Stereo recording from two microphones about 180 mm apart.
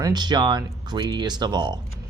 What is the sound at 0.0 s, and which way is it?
Speech, 25° right (ahead or behind).